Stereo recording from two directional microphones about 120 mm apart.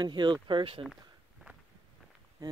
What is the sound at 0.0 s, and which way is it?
Speech, 40° right (ahead or behind).